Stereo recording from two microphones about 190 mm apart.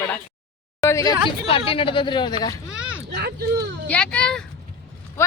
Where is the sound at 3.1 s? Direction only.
60° right (ahead or behind).